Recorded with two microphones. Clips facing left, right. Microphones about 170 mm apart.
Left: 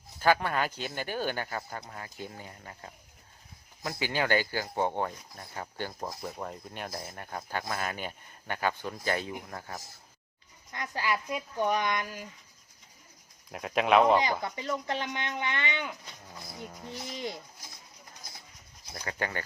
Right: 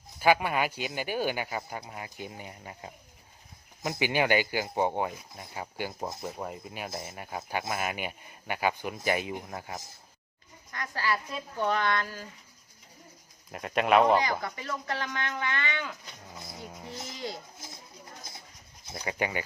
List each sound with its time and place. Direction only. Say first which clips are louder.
0.2 s speech: right 1 dB; 10° right (ahead or behind)
6.1 s speech: right 1 dB; 20° right (ahead or behind)
6.3 s speech: right 1 dB; 5° right (ahead or behind)
10.7 s speech: even; 20° left (ahead or behind)
13.5 s speech: even; centre (ahead or behind)
14.4 s speech: left 2 dB; 20° left (ahead or behind)
16.3 s speech: right 1 dB; centre (ahead or behind)
16.8 s speech: even; 20° right (ahead or behind)
18.9 s speech: right 3 dB; 15° right (ahead or behind)